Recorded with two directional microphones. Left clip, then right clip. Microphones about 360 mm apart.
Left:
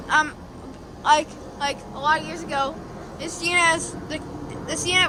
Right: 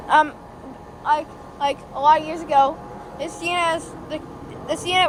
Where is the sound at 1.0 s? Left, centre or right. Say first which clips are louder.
Left 2 dB; centre.